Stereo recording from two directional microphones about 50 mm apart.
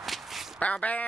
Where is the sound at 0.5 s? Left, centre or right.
Left.